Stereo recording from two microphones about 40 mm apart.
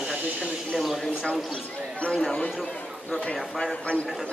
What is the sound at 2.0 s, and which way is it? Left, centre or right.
Speech, left.